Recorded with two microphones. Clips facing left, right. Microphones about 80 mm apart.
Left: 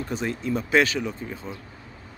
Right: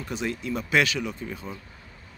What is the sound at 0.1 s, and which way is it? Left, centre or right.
Speech, left.